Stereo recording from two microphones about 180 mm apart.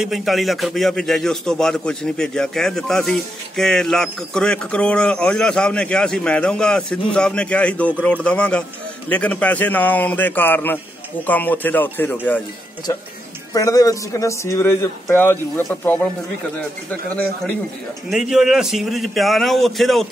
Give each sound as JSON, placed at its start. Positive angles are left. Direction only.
{"t": 0.0, "sound": "a man's voice", "side_deg": 0}
{"t": 13.5, "sound": "speech", "side_deg": 20}
{"t": 18.1, "sound": "a man's voice", "side_deg": -5}